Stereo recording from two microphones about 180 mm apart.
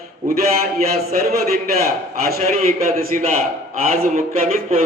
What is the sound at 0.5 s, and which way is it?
A man's voice, 60° right (ahead or behind).